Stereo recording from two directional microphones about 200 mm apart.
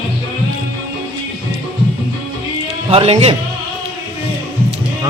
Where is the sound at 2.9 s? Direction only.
30° right (ahead or behind).